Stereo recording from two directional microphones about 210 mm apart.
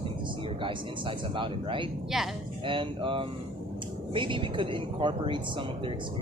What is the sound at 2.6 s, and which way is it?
Speech, 25° right (ahead or behind).